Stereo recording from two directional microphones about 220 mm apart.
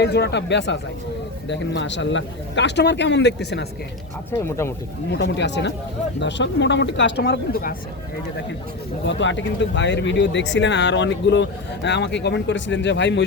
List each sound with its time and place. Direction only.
0.0 s a man's voice: 50° left (ahead or behind)
4.3 s speech: 10° left (ahead or behind)
5.1 s a man's voice: 55° left (ahead or behind)
9.0 s speech: 55° left (ahead or behind)